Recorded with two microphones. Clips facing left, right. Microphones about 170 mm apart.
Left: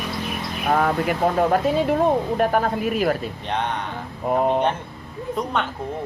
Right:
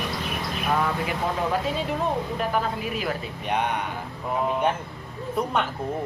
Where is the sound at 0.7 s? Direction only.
50° left (ahead or behind).